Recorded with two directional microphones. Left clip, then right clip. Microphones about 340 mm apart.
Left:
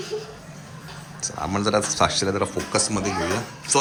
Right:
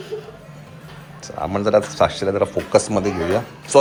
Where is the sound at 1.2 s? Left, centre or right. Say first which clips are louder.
Right 3 dB; centre.